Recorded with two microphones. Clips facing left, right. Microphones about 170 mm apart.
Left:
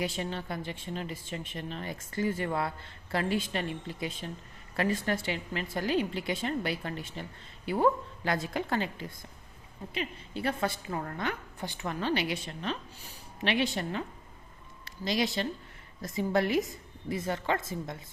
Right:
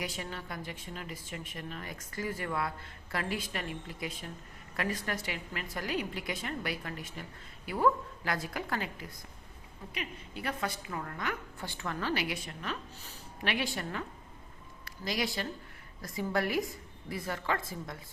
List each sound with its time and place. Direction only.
0.0 s a woman's voice: 25° left (ahead or behind)
11.6 s a woman's voice: 15° left (ahead or behind)